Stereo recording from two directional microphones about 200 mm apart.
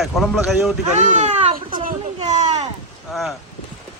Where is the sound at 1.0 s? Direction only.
35° right (ahead or behind).